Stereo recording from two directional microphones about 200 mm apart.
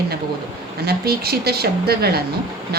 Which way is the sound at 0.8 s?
50° right (ahead or behind).